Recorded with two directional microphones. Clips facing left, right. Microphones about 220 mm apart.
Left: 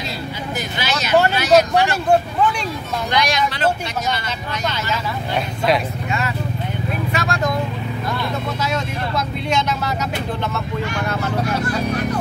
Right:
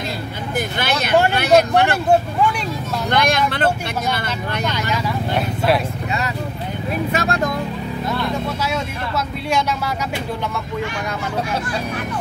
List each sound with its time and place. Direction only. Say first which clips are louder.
0.7 s a sound: right 2 dB; 55° right (ahead or behind)
1.3 s speech: even; 60° right (ahead or behind)
3.1 s speech: right 2 dB; 55° right (ahead or behind)